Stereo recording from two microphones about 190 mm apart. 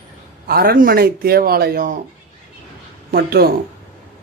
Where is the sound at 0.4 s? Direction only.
50° right (ahead or behind).